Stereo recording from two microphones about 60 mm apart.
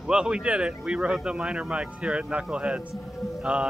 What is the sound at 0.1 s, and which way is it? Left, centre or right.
Speech, centre.